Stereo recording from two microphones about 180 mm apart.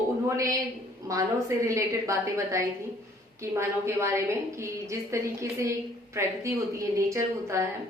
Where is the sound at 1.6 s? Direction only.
15° right (ahead or behind).